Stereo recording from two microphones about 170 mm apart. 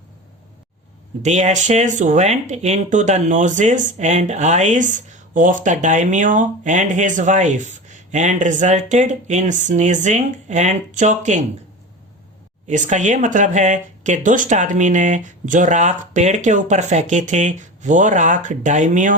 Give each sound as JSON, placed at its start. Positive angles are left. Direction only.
{"t": 1.2, "sound": "speech", "side_deg": -40}
{"t": 12.6, "sound": "speech", "side_deg": -45}